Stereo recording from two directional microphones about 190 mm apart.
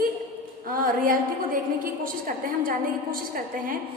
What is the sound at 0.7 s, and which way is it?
Speech, 45° right (ahead or behind).